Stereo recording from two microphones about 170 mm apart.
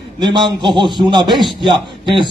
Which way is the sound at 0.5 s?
25° right (ahead or behind).